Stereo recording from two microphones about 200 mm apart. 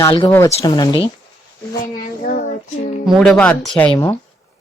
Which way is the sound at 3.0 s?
Centre (ahead or behind).